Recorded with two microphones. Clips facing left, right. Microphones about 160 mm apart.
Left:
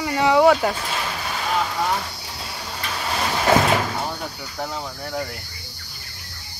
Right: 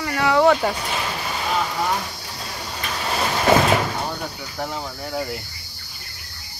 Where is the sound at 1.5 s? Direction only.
5° right (ahead or behind).